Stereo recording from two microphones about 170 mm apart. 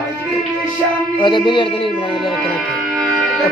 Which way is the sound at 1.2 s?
30° left (ahead or behind).